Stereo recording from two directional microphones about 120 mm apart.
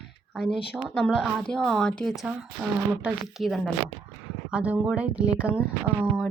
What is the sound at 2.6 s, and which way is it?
Speech, 15° right (ahead or behind).